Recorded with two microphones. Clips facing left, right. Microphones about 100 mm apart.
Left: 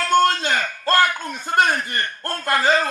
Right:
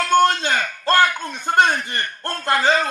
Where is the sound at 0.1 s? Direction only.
25° right (ahead or behind).